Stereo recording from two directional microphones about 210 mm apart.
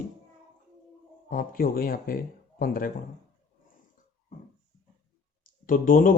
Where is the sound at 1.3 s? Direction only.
45° left (ahead or behind).